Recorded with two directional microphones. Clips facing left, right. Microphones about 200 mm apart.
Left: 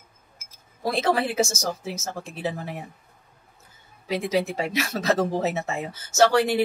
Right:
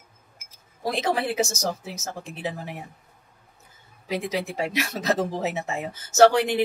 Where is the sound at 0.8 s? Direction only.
15° right (ahead or behind).